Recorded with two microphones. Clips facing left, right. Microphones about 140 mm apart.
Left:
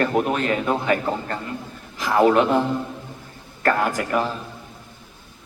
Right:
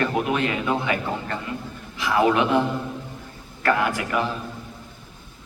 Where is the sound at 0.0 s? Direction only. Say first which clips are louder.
Left 2 dB; 40° left (ahead or behind).